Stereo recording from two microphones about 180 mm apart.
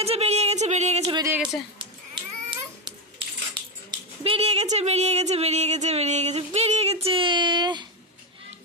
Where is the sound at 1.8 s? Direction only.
25° right (ahead or behind).